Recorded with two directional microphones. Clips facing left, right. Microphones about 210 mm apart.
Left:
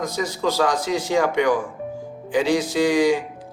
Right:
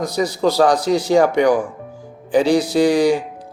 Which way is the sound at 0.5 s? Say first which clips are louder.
Right 7 dB; 35° right (ahead or behind).